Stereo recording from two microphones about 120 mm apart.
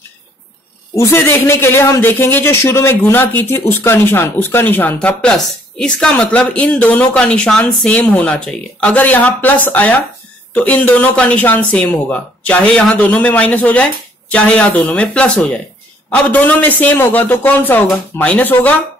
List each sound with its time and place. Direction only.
0.9 s a man's voice: 25° left (ahead or behind)